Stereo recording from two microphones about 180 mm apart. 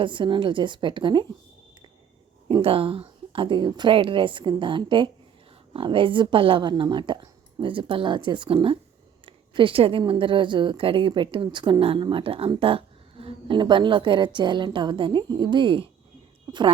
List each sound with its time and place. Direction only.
0.0 s speech: 25° right (ahead or behind)
2.5 s speech: 30° right (ahead or behind)